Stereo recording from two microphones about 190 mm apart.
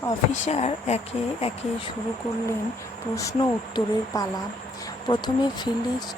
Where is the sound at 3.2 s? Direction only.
20° left (ahead or behind).